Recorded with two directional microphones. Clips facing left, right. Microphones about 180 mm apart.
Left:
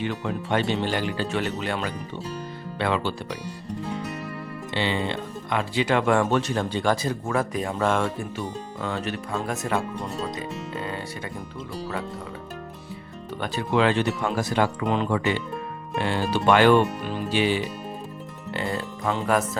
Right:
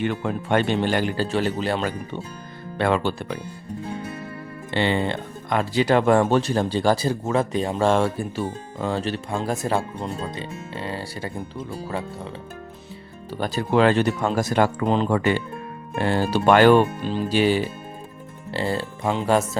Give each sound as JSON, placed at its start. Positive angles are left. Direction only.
{"t": 0.0, "sound": "speech", "side_deg": -55}
{"t": 2.7, "sound": "speech", "side_deg": -45}
{"t": 4.7, "sound": "speech", "side_deg": -50}
{"t": 13.4, "sound": "speech", "side_deg": -40}
{"t": 15.2, "sound": "speech", "side_deg": -50}
{"t": 17.0, "sound": "speech", "side_deg": -30}